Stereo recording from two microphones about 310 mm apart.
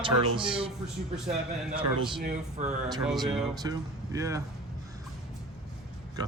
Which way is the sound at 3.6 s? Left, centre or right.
Centre.